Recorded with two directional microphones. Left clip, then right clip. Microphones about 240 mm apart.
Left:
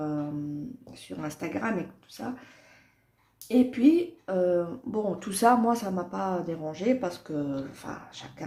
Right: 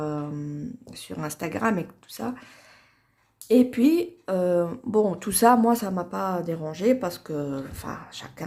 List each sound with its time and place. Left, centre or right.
0.0 s a sound: right
0.9 s speech: right
3.5 s speech: right